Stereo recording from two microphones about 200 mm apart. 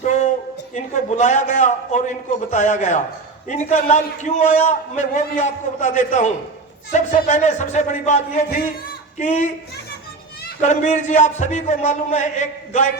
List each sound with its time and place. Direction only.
0.0 s a sound: 40° left (ahead or behind)
0.7 s a man's voice: 35° left (ahead or behind)
10.6 s a man's voice: 35° left (ahead or behind)